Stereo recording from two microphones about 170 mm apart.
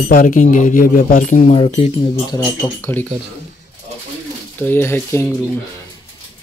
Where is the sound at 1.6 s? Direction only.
35° left (ahead or behind).